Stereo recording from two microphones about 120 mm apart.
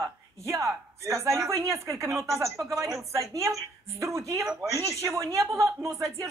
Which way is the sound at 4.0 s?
25° right (ahead or behind).